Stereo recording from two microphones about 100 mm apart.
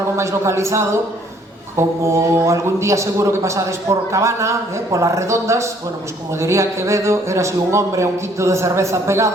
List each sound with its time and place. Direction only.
0.2 s a man's voice: 30° right (ahead or behind)